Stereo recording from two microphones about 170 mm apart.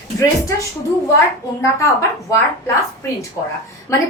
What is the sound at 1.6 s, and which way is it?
A woman's voice, 20° left (ahead or behind).